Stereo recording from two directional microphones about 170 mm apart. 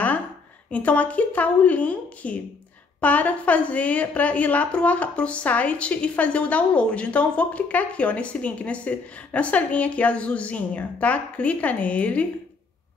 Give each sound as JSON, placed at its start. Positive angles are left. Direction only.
{"t": 0.7, "sound": "a woman's voice", "side_deg": 10}